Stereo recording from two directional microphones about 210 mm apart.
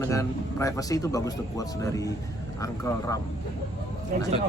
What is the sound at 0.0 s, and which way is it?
Speech, 15° left (ahead or behind).